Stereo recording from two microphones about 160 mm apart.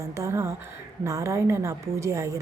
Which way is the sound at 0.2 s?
15° right (ahead or behind).